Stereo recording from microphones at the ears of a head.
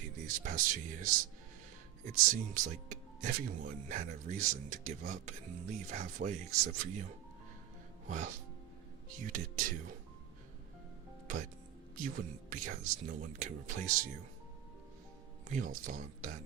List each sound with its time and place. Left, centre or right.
0.0 s speech: right
11.9 s speech: right
15.4 s speech: right